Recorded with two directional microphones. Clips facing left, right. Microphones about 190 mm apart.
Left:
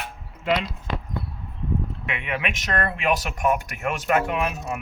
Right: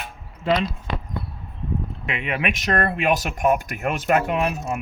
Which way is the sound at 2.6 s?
30° right (ahead or behind).